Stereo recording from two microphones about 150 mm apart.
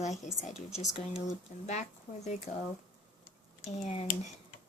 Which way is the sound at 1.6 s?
50° left (ahead or behind).